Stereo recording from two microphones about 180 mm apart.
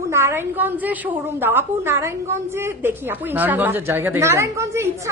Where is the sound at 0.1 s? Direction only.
15° right (ahead or behind).